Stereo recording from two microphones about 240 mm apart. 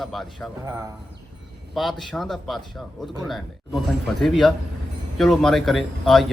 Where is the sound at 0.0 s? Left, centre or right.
Centre.